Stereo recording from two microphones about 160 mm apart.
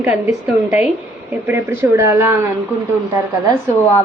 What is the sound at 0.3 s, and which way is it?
A woman's voice, 10° right (ahead or behind).